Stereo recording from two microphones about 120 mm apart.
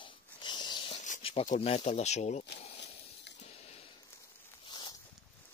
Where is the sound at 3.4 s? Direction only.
60° left (ahead or behind).